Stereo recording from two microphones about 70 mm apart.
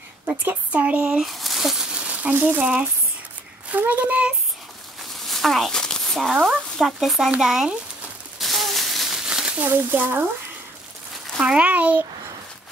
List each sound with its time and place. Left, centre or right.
0.3 s speech: right
1.2 s speech: centre
5.2 s a sound: centre
6.4 s speech: centre
8.4 s a sound: centre
9.6 s speech: right
11.3 s speech: centre